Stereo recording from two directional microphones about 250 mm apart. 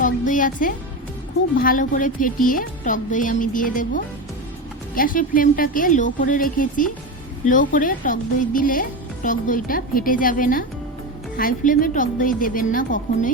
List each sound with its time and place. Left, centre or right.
0.0 s music: left
1.5 s speech: left